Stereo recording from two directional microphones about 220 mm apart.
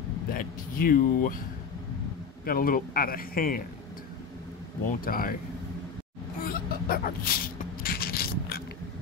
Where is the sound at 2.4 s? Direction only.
40° left (ahead or behind).